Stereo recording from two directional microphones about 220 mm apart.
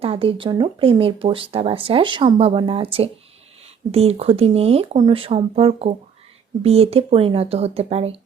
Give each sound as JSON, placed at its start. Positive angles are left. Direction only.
{"t": 0.0, "sound": "speech", "side_deg": -25}